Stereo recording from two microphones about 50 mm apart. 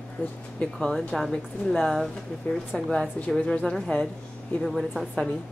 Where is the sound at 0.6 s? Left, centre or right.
Centre.